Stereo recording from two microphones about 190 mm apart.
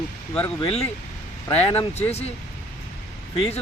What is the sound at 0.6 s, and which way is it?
Speech, 30° left (ahead or behind).